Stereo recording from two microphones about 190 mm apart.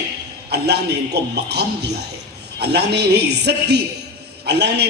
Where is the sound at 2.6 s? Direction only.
60° right (ahead or behind).